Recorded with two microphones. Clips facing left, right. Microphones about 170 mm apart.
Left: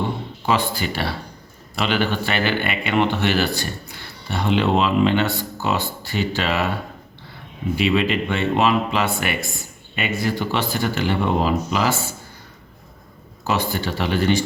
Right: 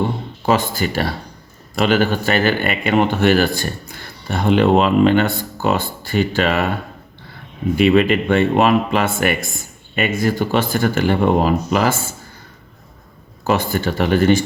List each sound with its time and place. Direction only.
0.4 s speech: 45° right (ahead or behind)
7.8 s speech: 55° right (ahead or behind)
13.5 s speech: 50° right (ahead or behind)